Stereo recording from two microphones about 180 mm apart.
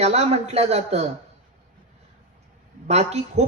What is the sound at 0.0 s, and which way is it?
A man's voice, 35° right (ahead or behind).